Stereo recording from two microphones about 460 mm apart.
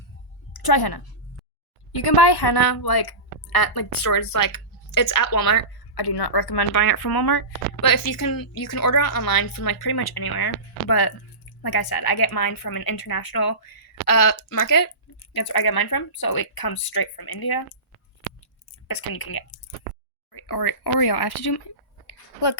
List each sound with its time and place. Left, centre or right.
0.5 s a woman's voice: left
18.9 s a woman's voice: left
22.0 s a sound: left